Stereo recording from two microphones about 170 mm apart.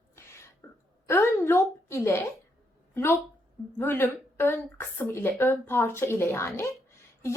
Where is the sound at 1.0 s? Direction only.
15° left (ahead or behind).